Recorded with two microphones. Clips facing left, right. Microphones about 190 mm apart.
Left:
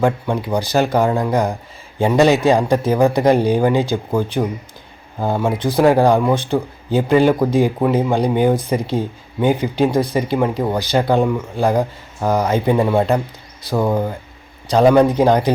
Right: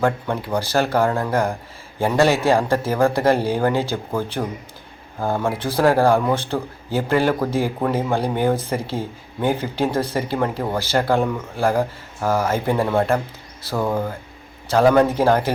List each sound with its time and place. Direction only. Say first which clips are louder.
0.0 s speech: left 3 dB; 15° left (ahead or behind)